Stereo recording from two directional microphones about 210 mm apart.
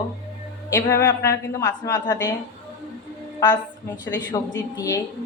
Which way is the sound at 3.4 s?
20° left (ahead or behind).